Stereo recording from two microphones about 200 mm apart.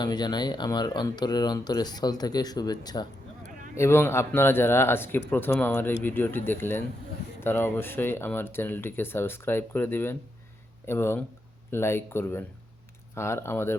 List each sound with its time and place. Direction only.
0.0 s speech: 20° left (ahead or behind)